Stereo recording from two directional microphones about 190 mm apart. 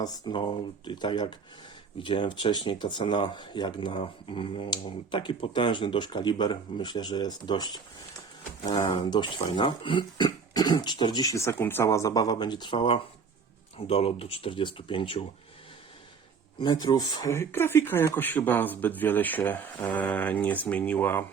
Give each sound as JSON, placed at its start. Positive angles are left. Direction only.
{"t": 0.0, "sound": "speech", "side_deg": 25}
{"t": 16.6, "sound": "speech", "side_deg": 20}